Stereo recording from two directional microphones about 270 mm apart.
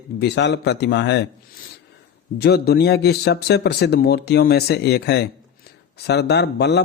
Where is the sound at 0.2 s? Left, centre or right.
Left.